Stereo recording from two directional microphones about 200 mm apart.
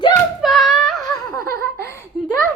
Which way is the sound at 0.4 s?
Centre (ahead or behind).